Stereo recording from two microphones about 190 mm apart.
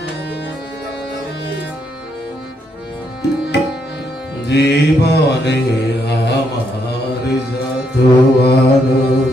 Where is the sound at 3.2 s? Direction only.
60° left (ahead or behind).